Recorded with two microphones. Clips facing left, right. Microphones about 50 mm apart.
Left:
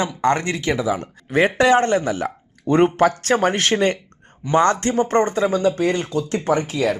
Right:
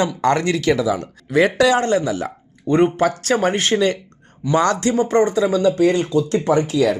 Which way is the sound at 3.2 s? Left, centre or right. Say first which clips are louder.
Even; left.